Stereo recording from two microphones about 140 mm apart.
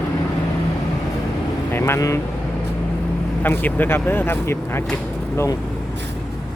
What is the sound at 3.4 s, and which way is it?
Speech, 15° left (ahead or behind).